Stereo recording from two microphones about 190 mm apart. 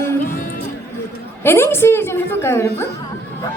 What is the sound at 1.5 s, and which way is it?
A woman's voice, 10° left (ahead or behind).